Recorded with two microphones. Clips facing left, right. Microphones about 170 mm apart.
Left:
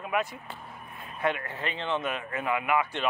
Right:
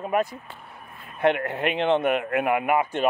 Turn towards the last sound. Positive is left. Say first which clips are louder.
# right 5 dB
turn(degrees=-45)  # may be behind; listen again after turning